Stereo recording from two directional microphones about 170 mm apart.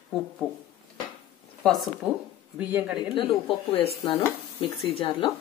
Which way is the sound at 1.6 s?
Centre (ahead or behind).